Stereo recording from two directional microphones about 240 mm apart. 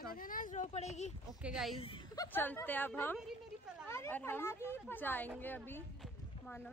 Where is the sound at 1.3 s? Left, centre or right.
Centre.